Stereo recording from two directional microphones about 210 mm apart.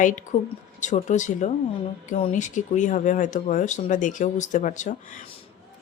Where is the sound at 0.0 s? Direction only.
35° left (ahead or behind).